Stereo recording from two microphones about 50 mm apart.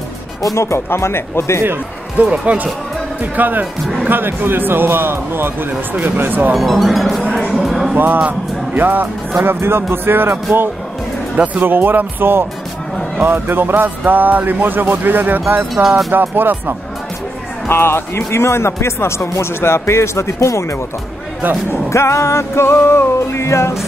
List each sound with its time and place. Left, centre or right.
0.6 s speech: left
2.4 s speech: right
6.5 s speech: centre
7.5 s music: centre
8.3 s speech: right
9.4 s speech: right
17.6 s speech: left
21.6 s music: left